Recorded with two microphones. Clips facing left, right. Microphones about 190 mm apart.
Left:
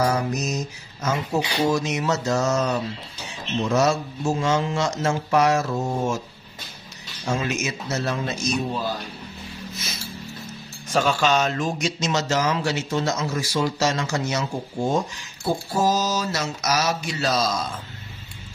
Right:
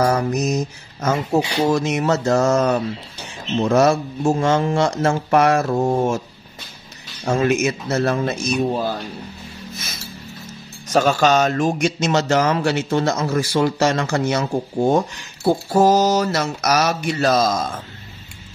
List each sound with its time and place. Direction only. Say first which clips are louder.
0.1 s a sound: right 5 dB; 55° right (ahead or behind)
1.7 s a man's voice: right 4 dB; 55° right (ahead or behind)
7.2 s a man's voice: right 8 dB; 55° right (ahead or behind)
10.9 s a man's voice: right 5 dB; 45° right (ahead or behind)